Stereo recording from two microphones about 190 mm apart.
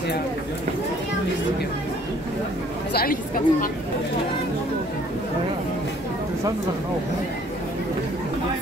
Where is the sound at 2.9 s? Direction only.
50° left (ahead or behind).